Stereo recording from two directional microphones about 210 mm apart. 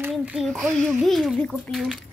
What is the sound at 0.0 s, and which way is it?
A child's voice, 5° right (ahead or behind).